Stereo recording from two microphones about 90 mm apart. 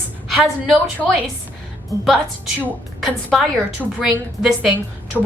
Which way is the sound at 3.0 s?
Centre (ahead or behind).